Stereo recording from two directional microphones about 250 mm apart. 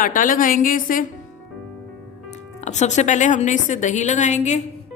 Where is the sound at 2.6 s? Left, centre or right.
Left.